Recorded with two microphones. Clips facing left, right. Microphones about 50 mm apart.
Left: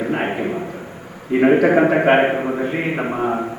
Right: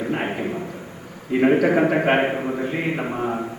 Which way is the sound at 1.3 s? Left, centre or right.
Centre.